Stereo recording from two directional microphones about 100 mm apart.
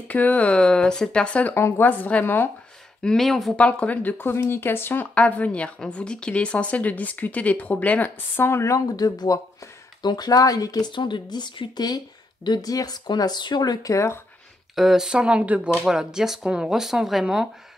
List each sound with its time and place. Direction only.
0.1 s speech: 15° left (ahead or behind)
3.0 s speech: 5° left (ahead or behind)
3.5 s speech: 15° left (ahead or behind); by 14.2 s 30° left (ahead or behind)
14.8 s speech: 5° right (ahead or behind)